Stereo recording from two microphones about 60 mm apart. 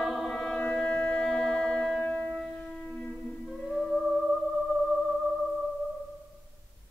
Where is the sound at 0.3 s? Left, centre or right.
Centre.